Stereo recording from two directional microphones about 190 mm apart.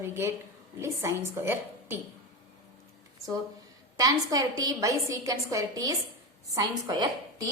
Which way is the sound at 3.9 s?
20° right (ahead or behind).